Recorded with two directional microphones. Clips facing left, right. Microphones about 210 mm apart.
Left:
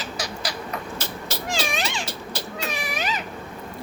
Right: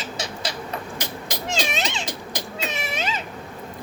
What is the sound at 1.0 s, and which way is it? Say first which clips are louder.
Cat: even; 20° right (ahead or behind).